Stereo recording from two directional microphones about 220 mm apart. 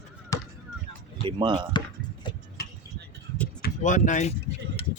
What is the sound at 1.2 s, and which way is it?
Speech, 20° right (ahead or behind).